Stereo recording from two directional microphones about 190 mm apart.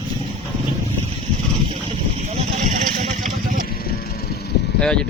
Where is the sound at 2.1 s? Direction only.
35° right (ahead or behind).